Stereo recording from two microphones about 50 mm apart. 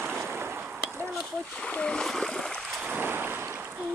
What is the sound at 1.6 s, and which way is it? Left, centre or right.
Speech, left.